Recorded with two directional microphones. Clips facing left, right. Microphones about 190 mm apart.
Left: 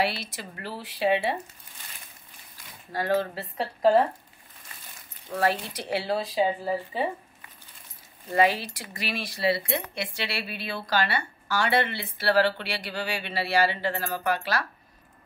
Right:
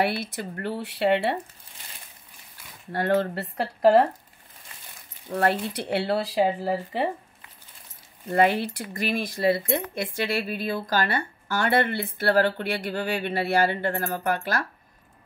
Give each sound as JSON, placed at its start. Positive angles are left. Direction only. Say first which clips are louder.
{"t": 0.0, "sound": "speech", "louder": "right 3 dB", "side_deg": -55}
{"t": 2.9, "sound": "speech", "louder": "right 3 dB", "side_deg": -60}
{"t": 5.4, "sound": "speech", "louder": "right 2 dB", "side_deg": -60}
{"t": 8.4, "sound": "speech", "louder": "right 2 dB", "side_deg": -55}